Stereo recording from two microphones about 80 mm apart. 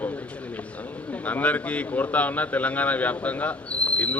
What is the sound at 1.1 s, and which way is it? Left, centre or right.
A man's voice, centre.